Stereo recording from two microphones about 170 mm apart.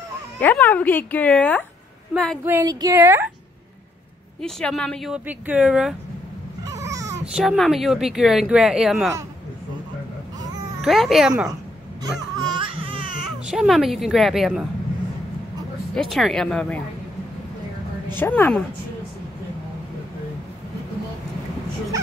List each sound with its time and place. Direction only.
0.4 s speech: 10° left (ahead or behind)
2.4 s speech: 15° right (ahead or behind)
4.4 s speech: 5° left (ahead or behind)
6.6 s babbling: 20° right (ahead or behind)
7.3 s speech: centre (ahead or behind)
10.8 s speech: centre (ahead or behind)
12.0 s a sound: 25° right (ahead or behind)
13.5 s speech: centre (ahead or behind)
15.9 s speech: centre (ahead or behind)
18.1 s speech: 10° left (ahead or behind)